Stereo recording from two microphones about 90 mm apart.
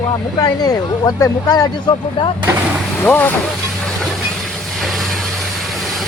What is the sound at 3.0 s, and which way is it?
Speech, 20° left (ahead or behind).